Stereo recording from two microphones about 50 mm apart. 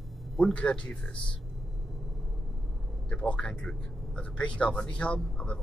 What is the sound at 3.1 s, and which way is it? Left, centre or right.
Speech, left.